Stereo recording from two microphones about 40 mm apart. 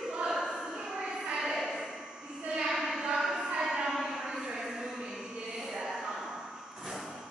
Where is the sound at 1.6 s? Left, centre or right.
Centre.